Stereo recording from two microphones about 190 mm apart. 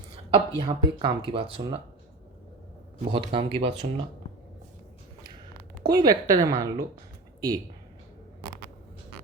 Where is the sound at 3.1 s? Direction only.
25° right (ahead or behind).